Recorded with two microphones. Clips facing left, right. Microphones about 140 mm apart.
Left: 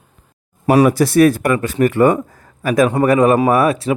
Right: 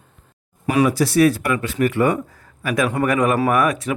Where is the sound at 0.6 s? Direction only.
40° left (ahead or behind).